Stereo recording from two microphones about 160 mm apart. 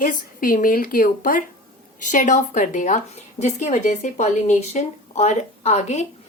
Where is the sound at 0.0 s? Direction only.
55° left (ahead or behind).